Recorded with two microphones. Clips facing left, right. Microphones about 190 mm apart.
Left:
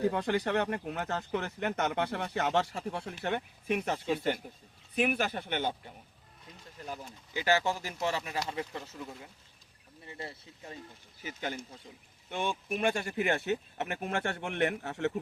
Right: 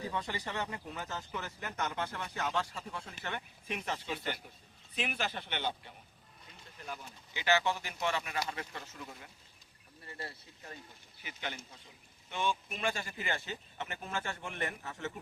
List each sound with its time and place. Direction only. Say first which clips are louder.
0.0 s speech: left 9 dB; 60° left (ahead or behind); by 8.8 s 25° left (ahead or behind)
10.1 s speech: left 3 dB; 20° left (ahead or behind)
11.2 s speech: left 6 dB; 40° left (ahead or behind)
12.3 s speech: left 2 dB; 50° left (ahead or behind)